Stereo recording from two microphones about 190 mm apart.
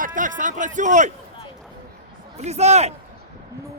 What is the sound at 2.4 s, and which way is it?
Speech, 35° right (ahead or behind).